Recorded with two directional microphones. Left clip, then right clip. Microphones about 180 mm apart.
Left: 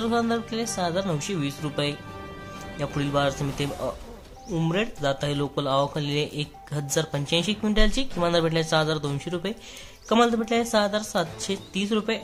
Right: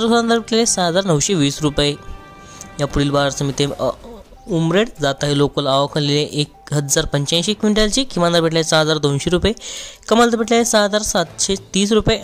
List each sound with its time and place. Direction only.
0.0 s speech: 45° right (ahead or behind)